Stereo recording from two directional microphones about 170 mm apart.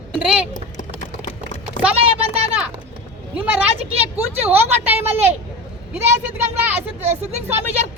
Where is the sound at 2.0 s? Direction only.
35° right (ahead or behind).